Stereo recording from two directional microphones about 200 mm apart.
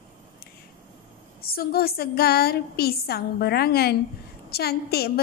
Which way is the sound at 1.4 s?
50° left (ahead or behind).